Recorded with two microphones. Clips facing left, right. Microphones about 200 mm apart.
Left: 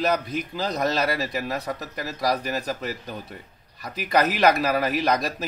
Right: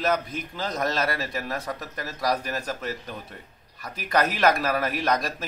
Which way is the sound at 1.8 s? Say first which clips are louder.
Left 2 dB; 5° left (ahead or behind).